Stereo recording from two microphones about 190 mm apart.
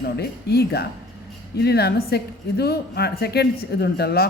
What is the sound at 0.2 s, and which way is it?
A woman's voice, 55° left (ahead or behind).